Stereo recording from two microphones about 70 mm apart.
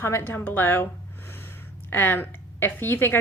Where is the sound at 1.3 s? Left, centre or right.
Left.